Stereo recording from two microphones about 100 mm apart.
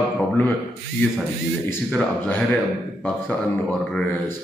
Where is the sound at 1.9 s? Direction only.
10° left (ahead or behind).